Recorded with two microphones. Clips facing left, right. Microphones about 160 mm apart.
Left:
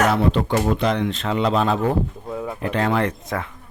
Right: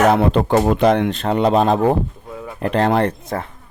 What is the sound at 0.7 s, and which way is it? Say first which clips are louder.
Speech: right 6 dB; 55° right (ahead or behind).